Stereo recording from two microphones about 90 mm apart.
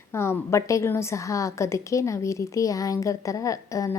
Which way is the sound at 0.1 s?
30° left (ahead or behind).